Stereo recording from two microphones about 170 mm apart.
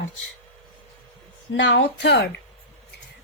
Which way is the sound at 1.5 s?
90° left.